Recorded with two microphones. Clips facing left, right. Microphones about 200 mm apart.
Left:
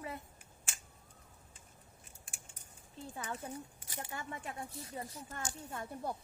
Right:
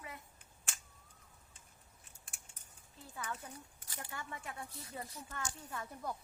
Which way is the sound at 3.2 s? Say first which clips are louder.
Left 3 dB; 25° left (ahead or behind).